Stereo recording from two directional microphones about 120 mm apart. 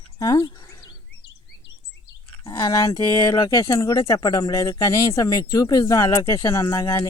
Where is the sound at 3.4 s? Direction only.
25° left (ahead or behind).